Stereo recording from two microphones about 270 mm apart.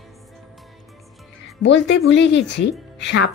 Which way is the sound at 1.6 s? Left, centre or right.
Left.